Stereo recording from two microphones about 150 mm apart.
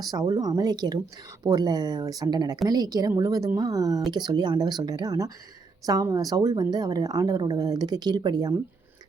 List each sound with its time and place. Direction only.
0.0 s a woman's voice: 25° right (ahead or behind)